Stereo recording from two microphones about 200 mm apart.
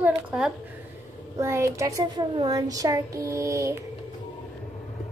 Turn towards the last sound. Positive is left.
turn(degrees=-15)  # may be behind; listen again after turning